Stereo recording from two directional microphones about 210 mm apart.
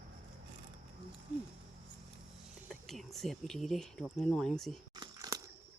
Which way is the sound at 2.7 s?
Centre (ahead or behind).